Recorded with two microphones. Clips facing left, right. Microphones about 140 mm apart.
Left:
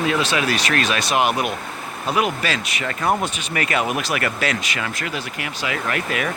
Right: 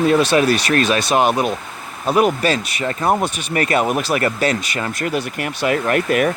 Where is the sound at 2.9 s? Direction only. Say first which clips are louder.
Right 3 dB; 30° right (ahead or behind).